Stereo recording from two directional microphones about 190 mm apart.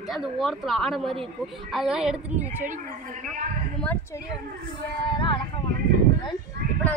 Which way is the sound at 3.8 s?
10° left (ahead or behind).